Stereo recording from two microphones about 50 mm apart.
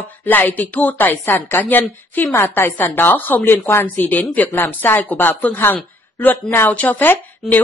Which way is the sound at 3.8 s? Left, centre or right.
Left.